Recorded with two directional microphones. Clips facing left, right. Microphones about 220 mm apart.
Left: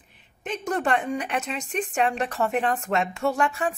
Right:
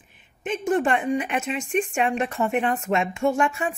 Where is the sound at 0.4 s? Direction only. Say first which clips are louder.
Right 5 dB; 5° right (ahead or behind).